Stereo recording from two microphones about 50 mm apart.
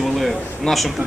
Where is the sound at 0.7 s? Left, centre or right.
Centre.